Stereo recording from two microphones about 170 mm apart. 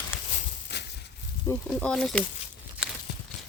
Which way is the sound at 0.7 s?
80° left.